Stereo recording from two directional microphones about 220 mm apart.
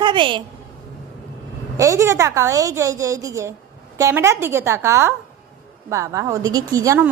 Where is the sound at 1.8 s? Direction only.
15° right (ahead or behind).